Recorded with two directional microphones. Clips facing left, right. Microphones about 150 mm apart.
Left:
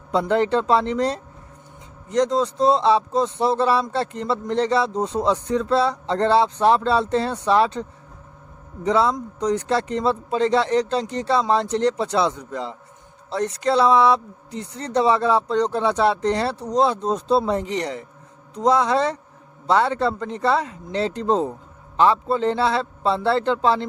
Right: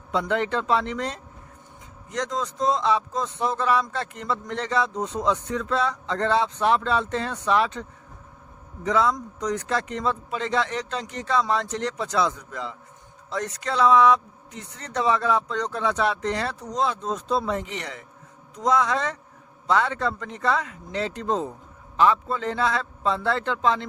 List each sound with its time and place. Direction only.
0.1 s a man's voice: 35° left (ahead or behind)